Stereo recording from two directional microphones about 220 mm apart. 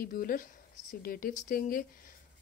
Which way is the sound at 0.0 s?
40° left (ahead or behind).